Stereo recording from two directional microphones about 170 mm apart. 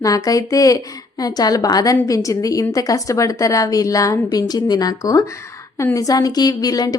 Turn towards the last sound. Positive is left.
turn(degrees=20)  # may be behind; listen again after turning